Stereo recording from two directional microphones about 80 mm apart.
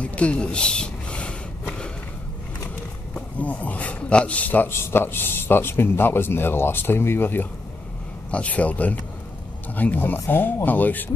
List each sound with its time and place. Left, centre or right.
0.0 s speech: centre
3.3 s a man's voice: centre